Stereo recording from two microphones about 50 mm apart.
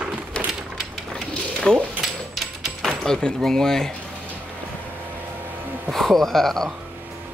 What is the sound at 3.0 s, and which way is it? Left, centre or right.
Speech, centre.